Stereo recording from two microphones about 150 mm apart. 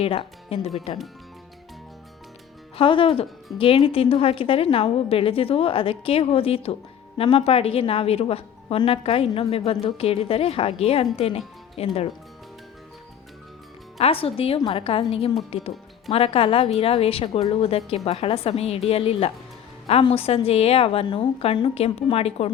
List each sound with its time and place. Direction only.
0.0 s speech: 40° left (ahead or behind)
2.7 s a woman's voice: 35° left (ahead or behind)
14.0 s a woman's voice: 40° left (ahead or behind)